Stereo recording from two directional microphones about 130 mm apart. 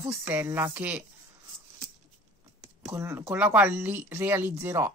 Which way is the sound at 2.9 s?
20° right (ahead or behind).